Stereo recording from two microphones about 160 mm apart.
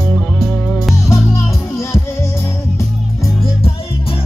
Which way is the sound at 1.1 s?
15° left (ahead or behind).